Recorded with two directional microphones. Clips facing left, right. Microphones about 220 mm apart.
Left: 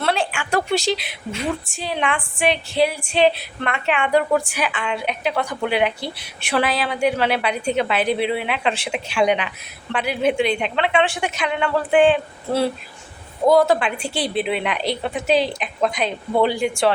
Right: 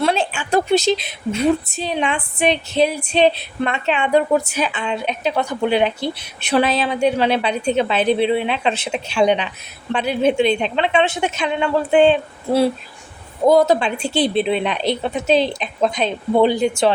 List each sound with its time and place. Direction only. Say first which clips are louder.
0.0 s a sound: right 3 dB; 15° right (ahead or behind)
0.3 s a woman's voice: right 4 dB; 20° right (ahead or behind)
13.4 s a woman's voice: right 2 dB; 20° right (ahead or behind)